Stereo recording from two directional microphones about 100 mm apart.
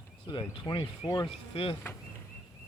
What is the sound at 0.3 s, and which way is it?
Speech, 50° left (ahead or behind).